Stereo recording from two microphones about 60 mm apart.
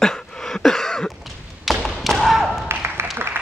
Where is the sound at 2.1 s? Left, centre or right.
Centre.